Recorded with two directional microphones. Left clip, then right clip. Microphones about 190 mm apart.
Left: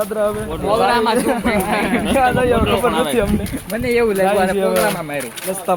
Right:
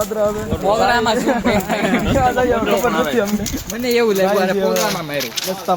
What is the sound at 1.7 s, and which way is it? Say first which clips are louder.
Speech: even; 60° right (ahead or behind).